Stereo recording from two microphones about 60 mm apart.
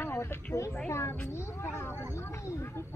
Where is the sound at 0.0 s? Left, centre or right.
Left.